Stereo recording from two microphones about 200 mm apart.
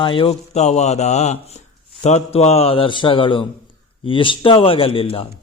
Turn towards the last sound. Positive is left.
turn(degrees=25)  # may be behind; listen again after turning